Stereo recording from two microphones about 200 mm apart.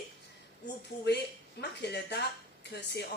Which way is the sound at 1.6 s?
55° left (ahead or behind).